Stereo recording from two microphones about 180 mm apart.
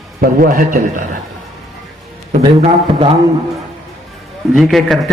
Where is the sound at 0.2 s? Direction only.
55° right (ahead or behind).